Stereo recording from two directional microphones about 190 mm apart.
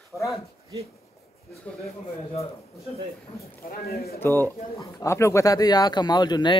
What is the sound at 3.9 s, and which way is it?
Speech, 55° left (ahead or behind).